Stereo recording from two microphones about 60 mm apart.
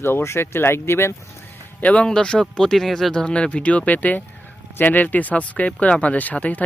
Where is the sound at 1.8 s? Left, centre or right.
Left.